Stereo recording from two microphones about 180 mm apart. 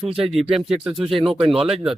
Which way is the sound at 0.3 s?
Centre (ahead or behind).